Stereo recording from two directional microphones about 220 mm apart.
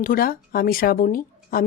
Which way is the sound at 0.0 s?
40° left (ahead or behind).